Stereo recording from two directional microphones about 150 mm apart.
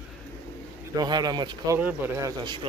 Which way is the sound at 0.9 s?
25° right (ahead or behind).